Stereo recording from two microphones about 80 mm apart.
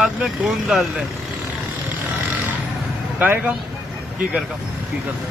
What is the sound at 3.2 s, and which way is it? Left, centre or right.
Speech, right.